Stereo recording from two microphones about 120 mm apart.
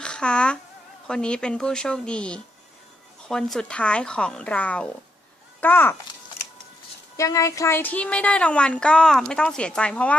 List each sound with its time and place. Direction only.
0.0 s a sound: 5° left (ahead or behind)
1.0 s a child's voice: 5° left (ahead or behind)
7.2 s speech: 25° left (ahead or behind)